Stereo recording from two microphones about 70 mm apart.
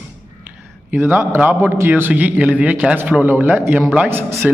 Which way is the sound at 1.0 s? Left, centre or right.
Right.